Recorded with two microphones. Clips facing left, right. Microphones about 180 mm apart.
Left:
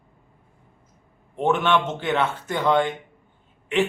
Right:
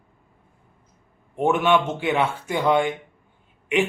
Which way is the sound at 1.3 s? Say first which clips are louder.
Right 2 dB; 10° right (ahead or behind).